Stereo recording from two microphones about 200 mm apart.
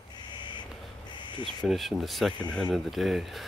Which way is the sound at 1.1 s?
25° left (ahead or behind).